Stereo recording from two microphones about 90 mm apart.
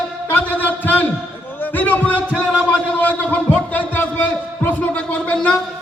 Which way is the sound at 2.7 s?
20° left (ahead or behind).